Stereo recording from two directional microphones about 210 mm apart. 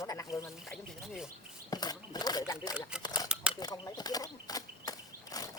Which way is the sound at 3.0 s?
20° left (ahead or behind).